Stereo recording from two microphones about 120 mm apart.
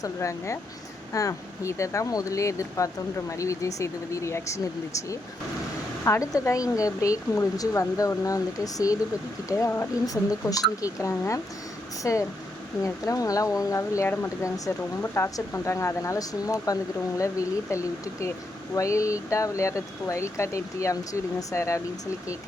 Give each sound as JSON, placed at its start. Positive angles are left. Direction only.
{"t": 0.0, "sound": "speech", "side_deg": 25}
{"t": 6.1, "sound": "speech", "side_deg": 25}